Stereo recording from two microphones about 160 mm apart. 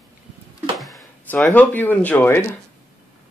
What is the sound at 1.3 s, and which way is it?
Speech, 10° left (ahead or behind).